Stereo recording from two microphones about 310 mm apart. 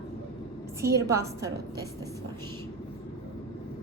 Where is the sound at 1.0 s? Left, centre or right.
Centre.